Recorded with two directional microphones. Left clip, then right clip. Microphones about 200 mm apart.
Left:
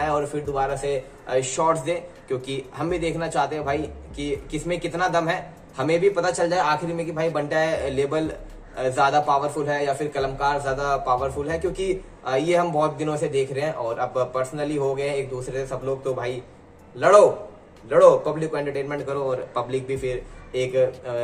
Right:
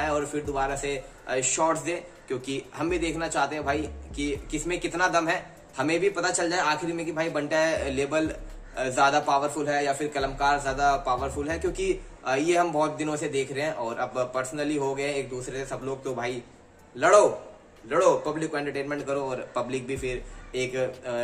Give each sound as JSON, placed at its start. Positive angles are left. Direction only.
{"t": 0.0, "sound": "a man's voice", "side_deg": -10}
{"t": 17.8, "sound": "a man's voice", "side_deg": -10}